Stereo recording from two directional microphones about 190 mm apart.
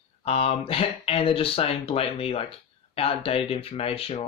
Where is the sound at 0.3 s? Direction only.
30° left (ahead or behind).